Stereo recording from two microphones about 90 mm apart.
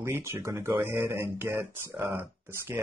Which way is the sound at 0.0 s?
30° right (ahead or behind).